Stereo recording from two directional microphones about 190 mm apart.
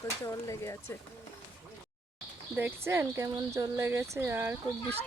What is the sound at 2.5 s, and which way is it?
Speech, 10° right (ahead or behind).